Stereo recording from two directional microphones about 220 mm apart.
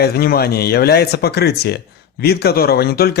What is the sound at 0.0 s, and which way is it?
Speech, 45° left (ahead or behind).